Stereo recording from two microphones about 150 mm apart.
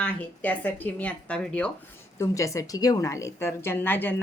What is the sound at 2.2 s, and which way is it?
A woman's voice, 20° left (ahead or behind).